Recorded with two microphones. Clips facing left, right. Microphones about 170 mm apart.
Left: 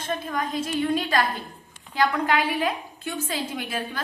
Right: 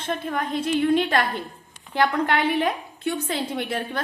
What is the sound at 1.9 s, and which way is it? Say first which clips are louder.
A woman's voice: right 1 dB; 60° right (ahead or behind).